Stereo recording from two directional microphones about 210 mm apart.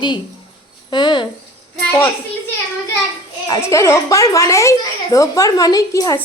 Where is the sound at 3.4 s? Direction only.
15° left (ahead or behind).